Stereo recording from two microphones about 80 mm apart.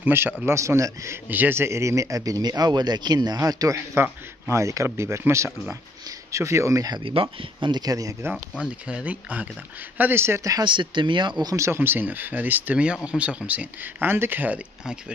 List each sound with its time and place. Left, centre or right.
0.0 s speech: right
0.5 s speech: right
1.3 s speech: right
3.7 s speech: right
8.5 s speech: centre; by 10.4 s right
10.6 s speech: right
11.5 s speech: right